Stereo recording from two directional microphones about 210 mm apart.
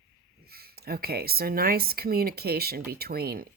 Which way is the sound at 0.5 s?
45° right (ahead or behind).